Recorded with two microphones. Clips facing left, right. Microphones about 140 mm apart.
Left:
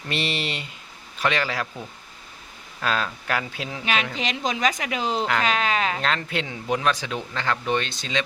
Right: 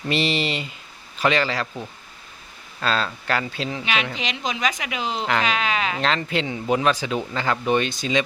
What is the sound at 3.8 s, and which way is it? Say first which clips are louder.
A woman's voice: left 3 dB; 40° left (ahead or behind).